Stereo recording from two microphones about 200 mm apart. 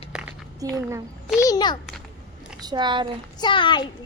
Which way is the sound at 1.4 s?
20° left (ahead or behind).